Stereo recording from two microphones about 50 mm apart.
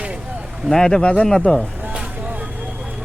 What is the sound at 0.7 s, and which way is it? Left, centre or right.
Speech, centre.